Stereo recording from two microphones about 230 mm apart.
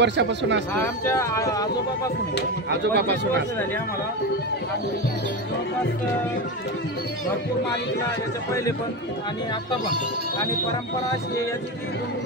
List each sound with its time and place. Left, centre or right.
0.0 s speech: right
1.0 s speech: centre
2.7 s speech: right